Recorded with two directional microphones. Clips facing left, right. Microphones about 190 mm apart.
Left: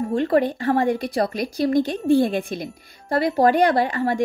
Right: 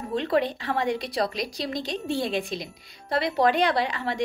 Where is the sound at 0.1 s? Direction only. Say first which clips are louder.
Left 3 dB; 50° left (ahead or behind).